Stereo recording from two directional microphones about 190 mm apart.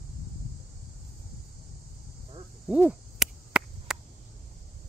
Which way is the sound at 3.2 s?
5° right (ahead or behind).